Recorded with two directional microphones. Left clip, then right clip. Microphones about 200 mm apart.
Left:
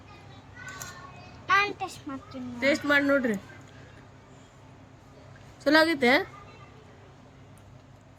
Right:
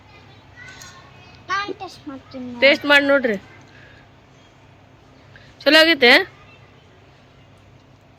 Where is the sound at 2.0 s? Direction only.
25° right (ahead or behind).